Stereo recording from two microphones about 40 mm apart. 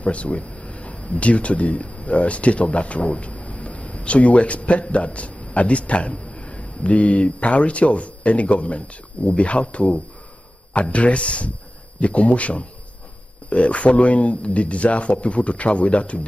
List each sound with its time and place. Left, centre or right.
0.0 s speech: left